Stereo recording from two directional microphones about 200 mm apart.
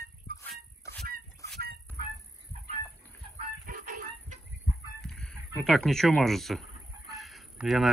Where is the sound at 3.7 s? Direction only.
45° right (ahead or behind).